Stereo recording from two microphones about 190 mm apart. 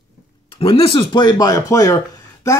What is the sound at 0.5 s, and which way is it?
Speech, 30° left (ahead or behind).